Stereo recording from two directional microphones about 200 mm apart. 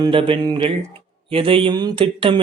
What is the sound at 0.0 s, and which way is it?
Speech, 25° right (ahead or behind).